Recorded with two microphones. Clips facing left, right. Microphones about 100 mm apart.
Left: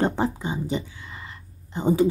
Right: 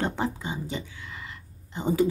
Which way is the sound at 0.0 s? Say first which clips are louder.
Left 5 dB; 30° left (ahead or behind).